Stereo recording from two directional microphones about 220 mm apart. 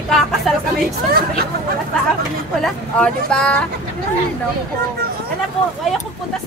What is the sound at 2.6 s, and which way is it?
Speech, 5° left (ahead or behind).